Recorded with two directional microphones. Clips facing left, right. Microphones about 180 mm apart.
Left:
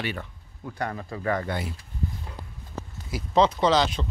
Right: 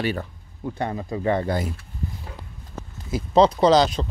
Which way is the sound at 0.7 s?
20° right (ahead or behind).